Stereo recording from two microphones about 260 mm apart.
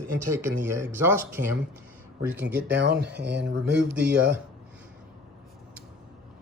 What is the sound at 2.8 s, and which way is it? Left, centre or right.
Speech, right.